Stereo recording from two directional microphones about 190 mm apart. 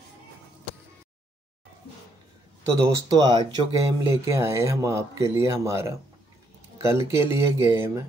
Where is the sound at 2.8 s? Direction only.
20° right (ahead or behind).